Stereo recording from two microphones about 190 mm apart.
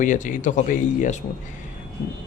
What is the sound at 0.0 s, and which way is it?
Speech, 40° left (ahead or behind).